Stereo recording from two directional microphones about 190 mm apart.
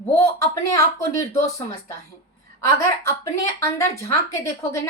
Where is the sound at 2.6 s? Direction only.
15° left (ahead or behind).